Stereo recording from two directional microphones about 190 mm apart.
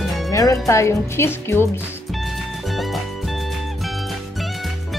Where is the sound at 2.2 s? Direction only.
Centre (ahead or behind).